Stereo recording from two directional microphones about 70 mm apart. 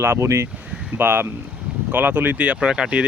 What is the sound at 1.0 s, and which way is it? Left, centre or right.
Speech, right.